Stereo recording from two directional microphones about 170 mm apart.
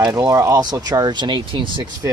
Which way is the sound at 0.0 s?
20° right (ahead or behind).